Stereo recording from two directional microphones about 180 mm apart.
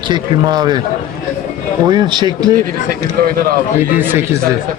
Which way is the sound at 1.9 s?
25° right (ahead or behind).